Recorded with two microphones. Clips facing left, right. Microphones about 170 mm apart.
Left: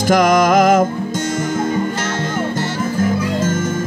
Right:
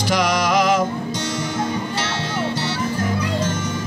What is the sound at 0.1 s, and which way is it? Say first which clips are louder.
Music: left 7 dB; 50° left (ahead or behind).